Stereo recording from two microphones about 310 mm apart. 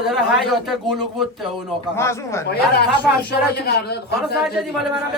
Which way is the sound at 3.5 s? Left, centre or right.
Left.